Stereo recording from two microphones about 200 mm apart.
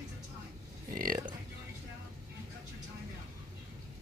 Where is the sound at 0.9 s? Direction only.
45° right (ahead or behind).